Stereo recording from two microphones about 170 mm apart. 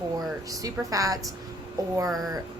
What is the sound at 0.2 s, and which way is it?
A woman's voice, 20° right (ahead or behind).